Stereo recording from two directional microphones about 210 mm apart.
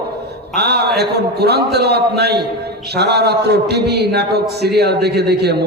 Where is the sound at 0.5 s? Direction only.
50° right (ahead or behind).